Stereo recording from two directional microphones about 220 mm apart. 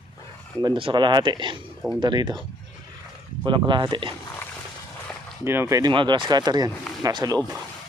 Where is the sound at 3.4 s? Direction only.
20° right (ahead or behind).